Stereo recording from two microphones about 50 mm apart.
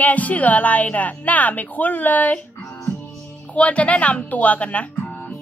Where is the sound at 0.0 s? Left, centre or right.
Left.